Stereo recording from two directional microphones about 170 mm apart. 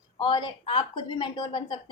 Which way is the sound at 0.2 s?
25° left (ahead or behind).